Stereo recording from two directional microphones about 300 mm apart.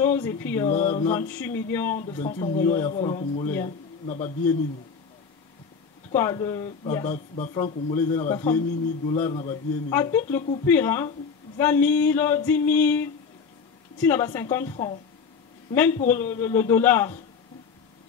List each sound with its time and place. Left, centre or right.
0.0 s speech: centre
0.7 s speech: left
1.3 s speech: centre
2.2 s speech: left
2.6 s speech: centre; by 4.5 s left
6.1 s speech: centre
7.1 s speech: left
7.6 s speech: centre